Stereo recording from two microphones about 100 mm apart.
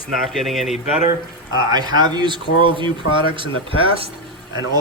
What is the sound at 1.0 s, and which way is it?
Speech, 40° right (ahead or behind).